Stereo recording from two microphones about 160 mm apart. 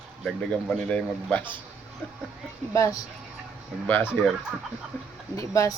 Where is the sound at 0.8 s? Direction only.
5° left (ahead or behind).